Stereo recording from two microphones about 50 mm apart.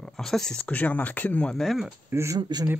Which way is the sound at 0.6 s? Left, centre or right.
Left.